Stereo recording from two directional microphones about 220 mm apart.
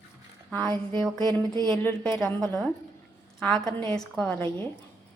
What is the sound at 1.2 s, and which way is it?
Music, 20° right (ahead or behind).